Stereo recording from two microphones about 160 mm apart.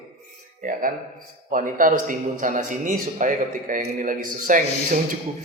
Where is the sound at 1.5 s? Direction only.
55° right (ahead or behind).